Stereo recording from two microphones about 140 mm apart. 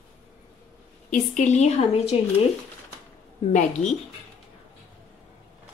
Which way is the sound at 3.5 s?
65° left (ahead or behind).